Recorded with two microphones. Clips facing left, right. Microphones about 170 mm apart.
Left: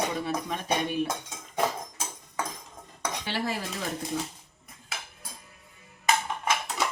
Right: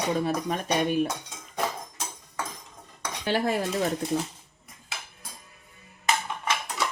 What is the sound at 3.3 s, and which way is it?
Speech, 45° right (ahead or behind).